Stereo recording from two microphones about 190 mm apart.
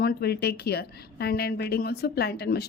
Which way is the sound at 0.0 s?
55° left (ahead or behind).